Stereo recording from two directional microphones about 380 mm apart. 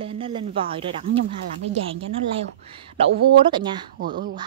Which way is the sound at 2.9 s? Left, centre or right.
Centre.